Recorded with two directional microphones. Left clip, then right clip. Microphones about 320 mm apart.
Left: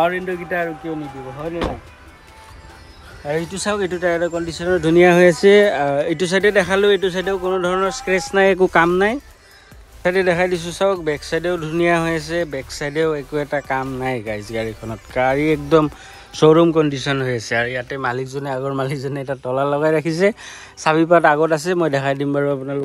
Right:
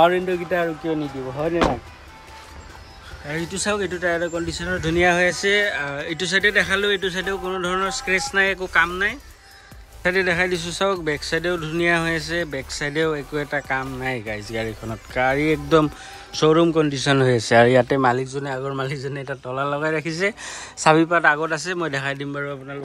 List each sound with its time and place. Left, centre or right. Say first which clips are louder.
0.0 s speech: right 2 dB; centre
1.4 s speech: right 4 dB; centre
3.3 s speech: left 3 dB; centre